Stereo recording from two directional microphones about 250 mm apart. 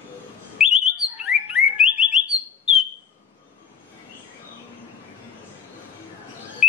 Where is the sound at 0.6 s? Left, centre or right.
Centre.